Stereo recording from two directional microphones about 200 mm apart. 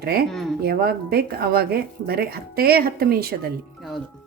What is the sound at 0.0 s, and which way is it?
Speech, 50° right (ahead or behind).